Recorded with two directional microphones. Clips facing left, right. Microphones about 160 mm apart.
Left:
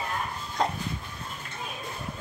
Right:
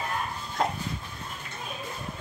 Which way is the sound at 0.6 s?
5° right (ahead or behind).